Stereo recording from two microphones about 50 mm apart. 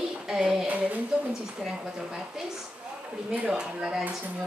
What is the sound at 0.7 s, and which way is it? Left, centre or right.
Speech, right.